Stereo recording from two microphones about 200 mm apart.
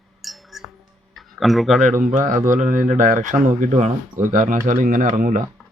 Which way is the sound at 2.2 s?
40° right (ahead or behind).